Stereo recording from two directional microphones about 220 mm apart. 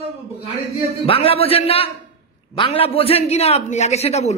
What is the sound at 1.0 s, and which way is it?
A man's voice, 25° left (ahead or behind).